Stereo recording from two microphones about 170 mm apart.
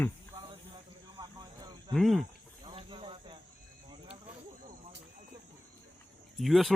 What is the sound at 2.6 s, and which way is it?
Snake, 30° right (ahead or behind).